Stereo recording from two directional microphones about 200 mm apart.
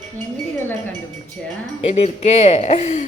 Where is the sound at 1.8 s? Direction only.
30° left (ahead or behind).